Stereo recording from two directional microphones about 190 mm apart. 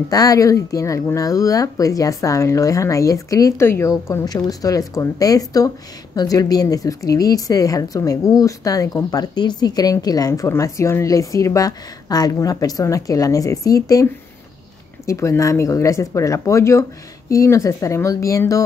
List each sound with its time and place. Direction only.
0.1 s speech: 20° left (ahead or behind)
15.0 s speech: 15° left (ahead or behind)